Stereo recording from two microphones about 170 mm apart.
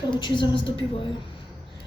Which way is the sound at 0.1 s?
30° left (ahead or behind).